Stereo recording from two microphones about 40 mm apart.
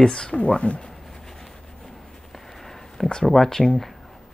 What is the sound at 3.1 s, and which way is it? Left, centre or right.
Speech, centre.